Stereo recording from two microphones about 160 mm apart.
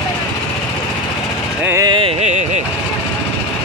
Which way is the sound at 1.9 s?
35° right (ahead or behind).